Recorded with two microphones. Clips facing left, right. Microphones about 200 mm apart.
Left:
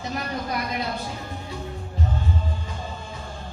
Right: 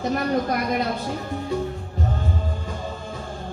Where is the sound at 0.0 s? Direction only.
50° right (ahead or behind).